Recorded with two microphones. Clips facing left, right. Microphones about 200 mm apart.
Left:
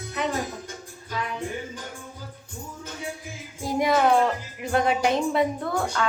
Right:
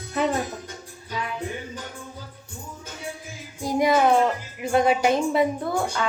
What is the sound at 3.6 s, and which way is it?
A woman's voice, centre (ahead or behind).